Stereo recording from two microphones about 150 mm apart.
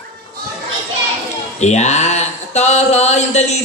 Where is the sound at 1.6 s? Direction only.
50° left (ahead or behind).